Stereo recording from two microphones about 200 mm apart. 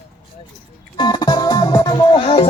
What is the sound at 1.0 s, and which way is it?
Music, 20° left (ahead or behind).